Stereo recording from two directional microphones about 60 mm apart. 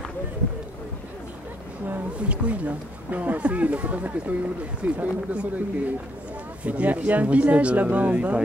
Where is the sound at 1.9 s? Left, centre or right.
Right.